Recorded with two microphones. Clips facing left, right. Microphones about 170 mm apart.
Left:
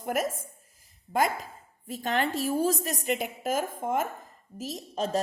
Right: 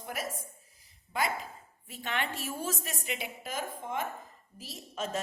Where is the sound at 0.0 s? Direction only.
50° left (ahead or behind).